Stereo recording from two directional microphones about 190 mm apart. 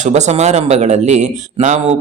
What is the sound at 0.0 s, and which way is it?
A man's voice, 35° right (ahead or behind).